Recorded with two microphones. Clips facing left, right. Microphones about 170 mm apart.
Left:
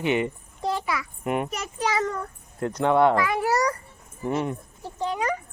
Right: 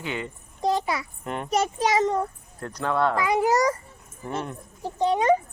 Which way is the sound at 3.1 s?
20° right (ahead or behind).